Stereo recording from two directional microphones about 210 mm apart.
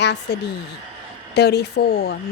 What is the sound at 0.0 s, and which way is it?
Speech, 55° left (ahead or behind).